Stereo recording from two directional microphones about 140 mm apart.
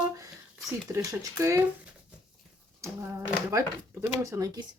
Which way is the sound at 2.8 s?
20° right (ahead or behind).